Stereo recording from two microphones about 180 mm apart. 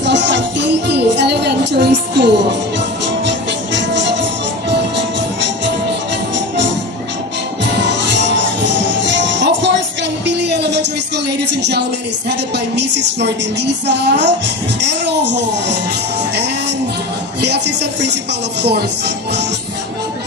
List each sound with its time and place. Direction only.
0.0 s music: 80° right
8.3 s music: 75° right (ahead or behind)
10.2 s a sound: 75° right (ahead or behind)
12.3 s music: 70° right (ahead or behind)
17.4 s music: 70° right (ahead or behind)